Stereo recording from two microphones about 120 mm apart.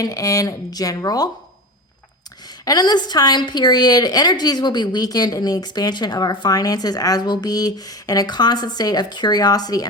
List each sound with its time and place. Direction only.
0.0 s a woman's voice: 30° left (ahead or behind)
2.6 s a woman's voice: 35° left (ahead or behind)